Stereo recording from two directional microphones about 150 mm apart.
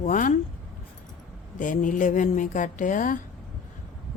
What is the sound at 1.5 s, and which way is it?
A woman's voice, 60° left (ahead or behind).